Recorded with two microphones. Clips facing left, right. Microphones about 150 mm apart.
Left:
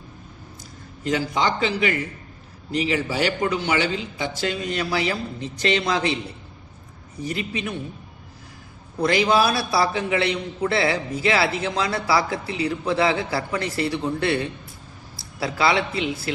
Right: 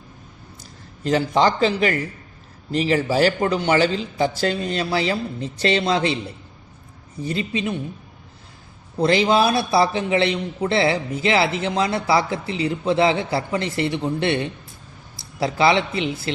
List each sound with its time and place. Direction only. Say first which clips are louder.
1.0 s a man's voice: right 4 dB; 35° right (ahead or behind)
7.3 s a man's voice: right 4 dB; 30° right (ahead or behind)
9.0 s a man's voice: right 2 dB; 25° right (ahead or behind)